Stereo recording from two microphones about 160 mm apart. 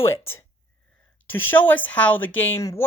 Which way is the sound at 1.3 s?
10° left (ahead or behind).